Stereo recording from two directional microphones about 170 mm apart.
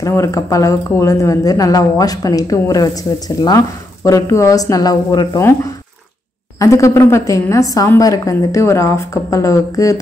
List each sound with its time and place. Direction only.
0.0 s speech: 20° left (ahead or behind)
6.6 s speech: 20° left (ahead or behind)